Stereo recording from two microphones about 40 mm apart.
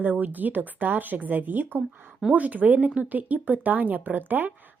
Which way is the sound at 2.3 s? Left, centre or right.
Right.